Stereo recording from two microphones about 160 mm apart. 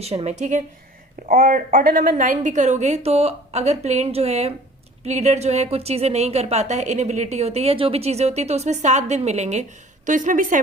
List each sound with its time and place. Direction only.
0.0 s a woman's voice: 40° right (ahead or behind)
1.3 s a woman's voice: 60° right (ahead or behind)